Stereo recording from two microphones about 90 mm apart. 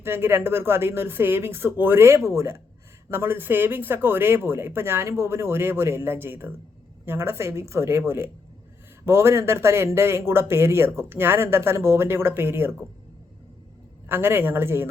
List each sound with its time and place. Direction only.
0.0 s a man's voice: 25° right (ahead or behind)
14.1 s a man's voice: 25° right (ahead or behind)